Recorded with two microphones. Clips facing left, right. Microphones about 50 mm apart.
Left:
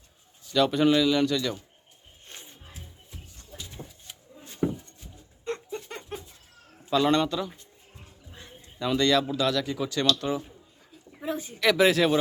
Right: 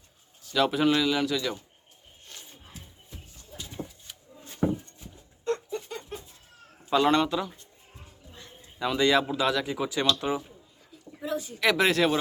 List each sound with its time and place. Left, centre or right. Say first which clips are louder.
0.5 s speech: left 2 dB; centre
2.2 s music: left 1 dB; left
5.9 s a sound: even; left
7.0 s speech: even; centre
8.8 s speech: even; centre
11.2 s speech: even; left
11.6 s speech: left 2 dB; centre